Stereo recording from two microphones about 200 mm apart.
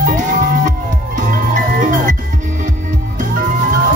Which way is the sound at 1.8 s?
40° right (ahead or behind).